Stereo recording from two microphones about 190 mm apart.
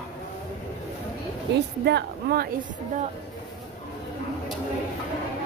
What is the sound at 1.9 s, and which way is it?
Speech, 60° right (ahead or behind).